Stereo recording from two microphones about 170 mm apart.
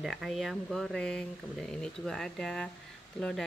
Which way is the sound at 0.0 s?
Centre (ahead or behind).